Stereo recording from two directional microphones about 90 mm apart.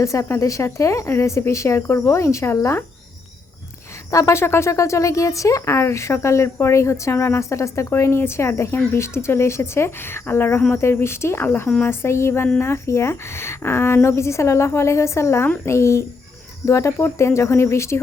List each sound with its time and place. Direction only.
0.0 s speech: 35° left (ahead or behind)
4.1 s speech: 35° left (ahead or behind)